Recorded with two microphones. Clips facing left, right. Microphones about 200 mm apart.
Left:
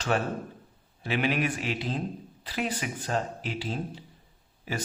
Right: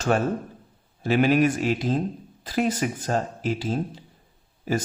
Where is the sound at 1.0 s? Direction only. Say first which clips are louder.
Right 8 dB; 45° right (ahead or behind).